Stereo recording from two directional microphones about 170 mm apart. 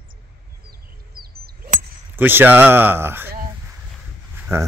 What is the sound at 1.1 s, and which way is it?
Arrow, 60° right (ahead or behind).